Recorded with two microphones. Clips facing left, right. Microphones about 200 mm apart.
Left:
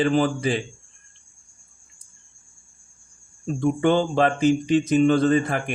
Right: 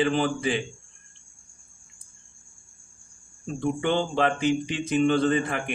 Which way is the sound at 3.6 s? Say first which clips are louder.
Left 5 dB; 45° left (ahead or behind).